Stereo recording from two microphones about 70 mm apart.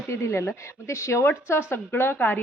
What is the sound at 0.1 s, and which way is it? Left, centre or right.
A woman's voice, left.